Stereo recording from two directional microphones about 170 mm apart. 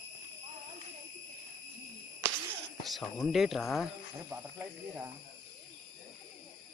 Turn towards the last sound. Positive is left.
turn(degrees=-10)  # may be behind; listen again after turning